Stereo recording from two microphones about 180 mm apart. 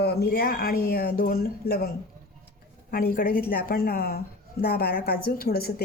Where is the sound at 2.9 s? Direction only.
50° left (ahead or behind).